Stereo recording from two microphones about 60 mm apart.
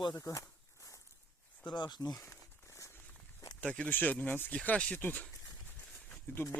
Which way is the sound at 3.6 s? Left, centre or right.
Centre.